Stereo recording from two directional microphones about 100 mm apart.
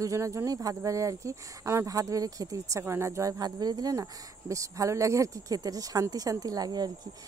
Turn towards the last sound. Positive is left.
turn(degrees=-40)  # may be behind; listen again after turning